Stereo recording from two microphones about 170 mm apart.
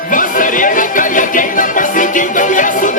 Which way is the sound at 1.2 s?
50° left (ahead or behind).